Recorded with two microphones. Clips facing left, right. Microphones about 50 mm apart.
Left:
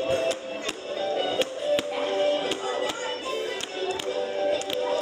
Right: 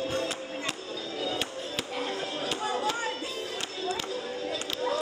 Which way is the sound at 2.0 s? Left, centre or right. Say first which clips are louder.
Left 9 dB; left.